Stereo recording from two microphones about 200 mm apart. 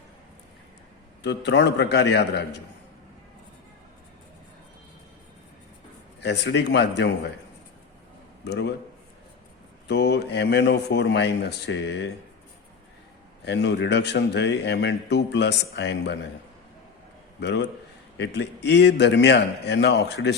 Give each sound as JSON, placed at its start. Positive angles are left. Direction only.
{"t": 1.2, "sound": "a man's voice", "side_deg": 60}
{"t": 6.1, "sound": "a man's voice", "side_deg": 60}
{"t": 8.4, "sound": "a man's voice", "side_deg": 60}
{"t": 9.9, "sound": "a man's voice", "side_deg": 60}
{"t": 13.4, "sound": "a man's voice", "side_deg": 60}
{"t": 17.4, "sound": "a man's voice", "side_deg": 60}